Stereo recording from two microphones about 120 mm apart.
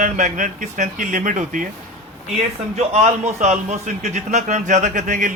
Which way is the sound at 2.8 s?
65° right (ahead or behind).